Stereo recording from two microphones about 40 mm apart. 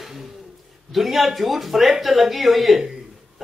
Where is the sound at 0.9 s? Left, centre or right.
Centre.